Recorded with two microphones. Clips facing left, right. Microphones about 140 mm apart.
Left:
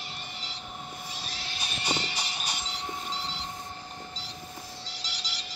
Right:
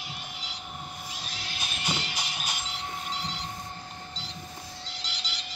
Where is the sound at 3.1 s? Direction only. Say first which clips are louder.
Right 1 dB; 30° left (ahead or behind).